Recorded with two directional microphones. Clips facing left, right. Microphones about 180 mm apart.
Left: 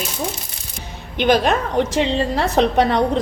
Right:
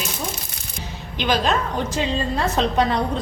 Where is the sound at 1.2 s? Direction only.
60° left (ahead or behind).